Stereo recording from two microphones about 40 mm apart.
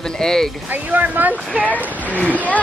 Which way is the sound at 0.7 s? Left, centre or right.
Right.